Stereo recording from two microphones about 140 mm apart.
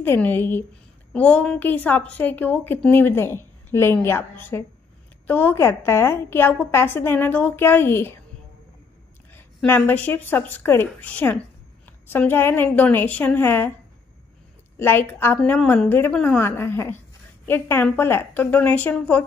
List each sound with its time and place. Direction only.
0.0 s a woman's voice: 15° left (ahead or behind)
9.3 s a woman's voice: 15° left (ahead or behind)
14.8 s a woman's voice: 15° left (ahead or behind)